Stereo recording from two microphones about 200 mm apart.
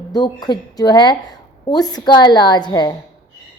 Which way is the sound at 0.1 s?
20° left (ahead or behind).